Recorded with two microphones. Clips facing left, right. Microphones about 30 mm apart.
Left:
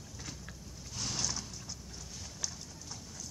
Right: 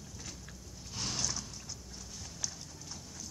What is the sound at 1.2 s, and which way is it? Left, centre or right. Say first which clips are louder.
Vehicle: even; centre.